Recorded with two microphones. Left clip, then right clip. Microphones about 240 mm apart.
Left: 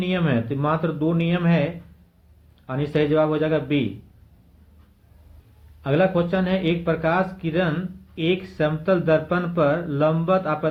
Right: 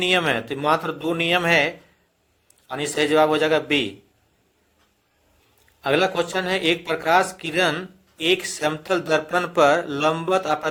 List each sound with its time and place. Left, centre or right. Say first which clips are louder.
0.0 s speech: right 5 dB; right
2.7 s speech: right 2 dB; right
5.8 s speech: even; right